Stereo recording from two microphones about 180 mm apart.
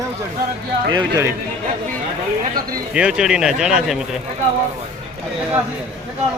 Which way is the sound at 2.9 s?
5° right (ahead or behind).